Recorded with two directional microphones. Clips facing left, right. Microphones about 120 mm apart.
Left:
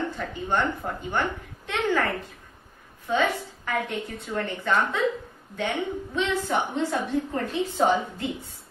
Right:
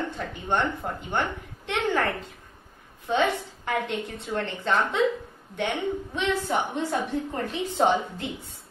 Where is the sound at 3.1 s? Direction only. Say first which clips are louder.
Even; 20° right (ahead or behind).